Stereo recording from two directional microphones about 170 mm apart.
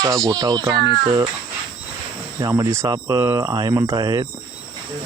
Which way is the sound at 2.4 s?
20° right (ahead or behind).